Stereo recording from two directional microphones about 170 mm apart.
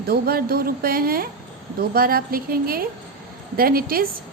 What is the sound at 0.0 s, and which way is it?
A woman's voice, 65° right (ahead or behind).